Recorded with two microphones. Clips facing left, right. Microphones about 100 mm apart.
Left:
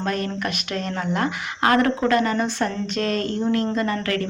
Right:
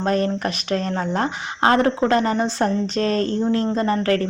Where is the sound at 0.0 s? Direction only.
35° right (ahead or behind).